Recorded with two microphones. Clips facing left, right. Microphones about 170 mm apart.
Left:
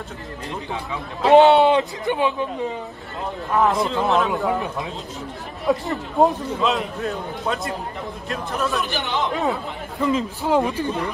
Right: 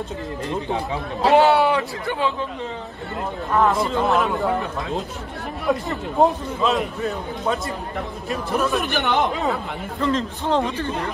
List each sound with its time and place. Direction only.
1.3 s speech: 20° left (ahead or behind)
3.5 s a man's voice: centre (ahead or behind)
5.7 s a man's voice: centre (ahead or behind)
8.7 s speech: 55° right (ahead or behind)
9.4 s a man's voice: centre (ahead or behind)